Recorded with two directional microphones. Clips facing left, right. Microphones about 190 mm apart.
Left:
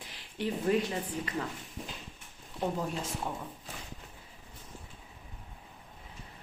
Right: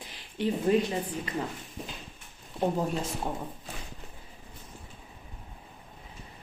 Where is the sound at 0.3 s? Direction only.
20° right (ahead or behind).